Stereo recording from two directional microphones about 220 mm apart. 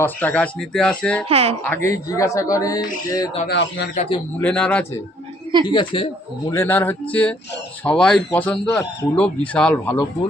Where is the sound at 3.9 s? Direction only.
30° left (ahead or behind).